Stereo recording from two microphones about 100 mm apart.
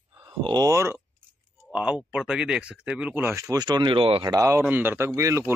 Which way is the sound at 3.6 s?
50° right (ahead or behind).